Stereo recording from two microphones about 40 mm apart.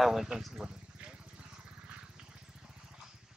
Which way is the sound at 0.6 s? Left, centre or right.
Right.